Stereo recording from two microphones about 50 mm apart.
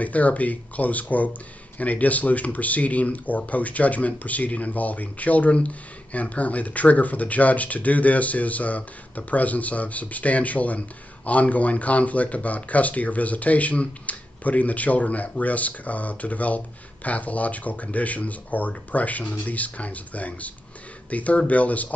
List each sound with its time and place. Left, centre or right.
0.0 s speech: left